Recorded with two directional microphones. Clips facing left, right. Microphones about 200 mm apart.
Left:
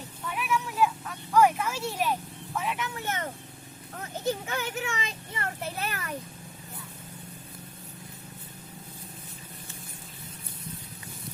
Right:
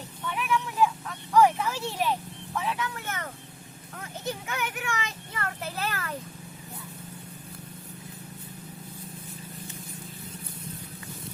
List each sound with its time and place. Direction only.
0.3 s vehicle: 10° left (ahead or behind)
2.6 s speech: 20° left (ahead or behind)